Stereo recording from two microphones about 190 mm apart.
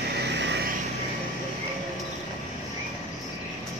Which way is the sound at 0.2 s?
65° right (ahead or behind).